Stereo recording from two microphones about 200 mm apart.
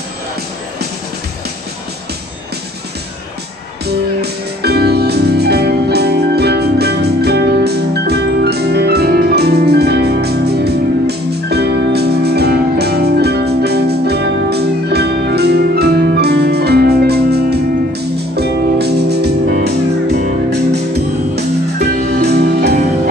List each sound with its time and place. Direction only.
3.8 s music: 55° right (ahead or behind)
21.4 s music: 55° right (ahead or behind)